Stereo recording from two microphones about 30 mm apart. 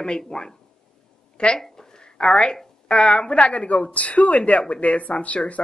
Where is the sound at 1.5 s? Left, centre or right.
Centre.